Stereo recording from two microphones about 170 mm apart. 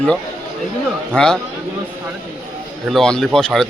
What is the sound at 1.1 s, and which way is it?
Speech, 5° left (ahead or behind).